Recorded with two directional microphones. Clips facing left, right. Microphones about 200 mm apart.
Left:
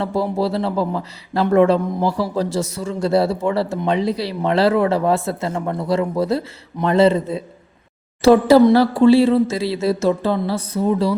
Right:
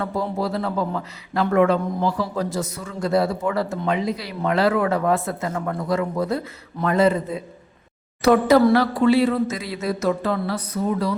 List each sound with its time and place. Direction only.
0.0 s speech: 30° left (ahead or behind)